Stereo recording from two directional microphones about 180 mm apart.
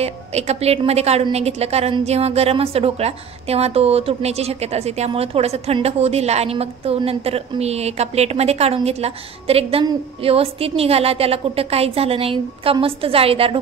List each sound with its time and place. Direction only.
0.0 s a woman's voice: 35° right (ahead or behind)